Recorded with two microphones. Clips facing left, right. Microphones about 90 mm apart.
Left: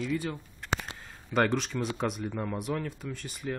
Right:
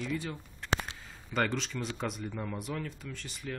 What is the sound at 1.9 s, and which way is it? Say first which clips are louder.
Speech: left 5 dB; 10° left (ahead or behind).